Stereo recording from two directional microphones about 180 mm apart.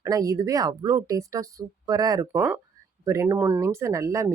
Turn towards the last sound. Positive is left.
turn(degrees=-15)  # may be behind; listen again after turning